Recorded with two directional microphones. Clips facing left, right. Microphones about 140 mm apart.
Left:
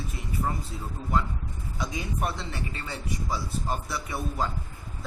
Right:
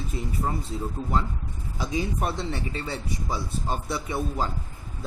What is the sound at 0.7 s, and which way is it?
A man's voice, 35° right (ahead or behind).